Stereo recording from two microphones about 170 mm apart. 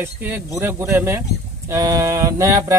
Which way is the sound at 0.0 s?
15° right (ahead or behind).